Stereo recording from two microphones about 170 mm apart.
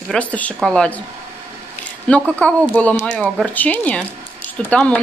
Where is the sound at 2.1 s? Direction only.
10° left (ahead or behind).